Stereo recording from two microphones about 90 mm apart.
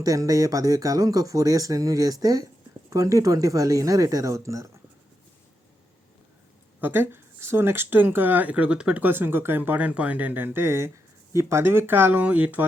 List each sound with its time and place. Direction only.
0.0 s speech: 40° right (ahead or behind)
6.8 s speech: 25° right (ahead or behind)